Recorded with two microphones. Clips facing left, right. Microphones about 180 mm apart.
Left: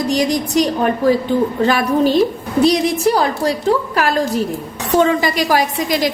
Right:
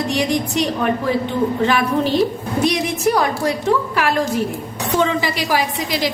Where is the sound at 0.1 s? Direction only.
40° left (ahead or behind).